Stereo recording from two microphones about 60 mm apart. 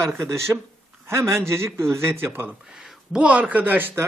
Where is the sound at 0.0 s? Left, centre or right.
Right.